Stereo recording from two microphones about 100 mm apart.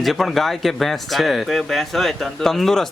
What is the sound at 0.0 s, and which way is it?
Speech, centre (ahead or behind).